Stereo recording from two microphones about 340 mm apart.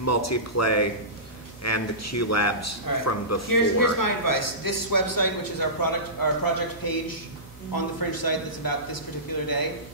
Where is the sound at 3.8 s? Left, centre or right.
Left.